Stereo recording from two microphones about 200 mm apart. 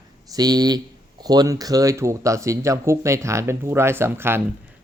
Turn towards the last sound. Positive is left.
turn(degrees=-10)  # may be behind; listen again after turning